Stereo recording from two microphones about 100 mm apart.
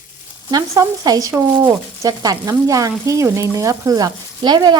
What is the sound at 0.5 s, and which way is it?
Sizzle, 35° right (ahead or behind).